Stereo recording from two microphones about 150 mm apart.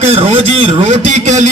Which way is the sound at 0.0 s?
40° right (ahead or behind).